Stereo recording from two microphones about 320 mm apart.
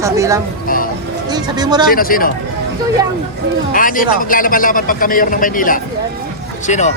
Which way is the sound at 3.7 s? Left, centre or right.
Left.